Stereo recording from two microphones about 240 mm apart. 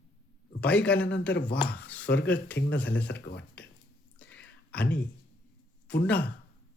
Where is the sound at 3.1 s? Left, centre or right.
Left.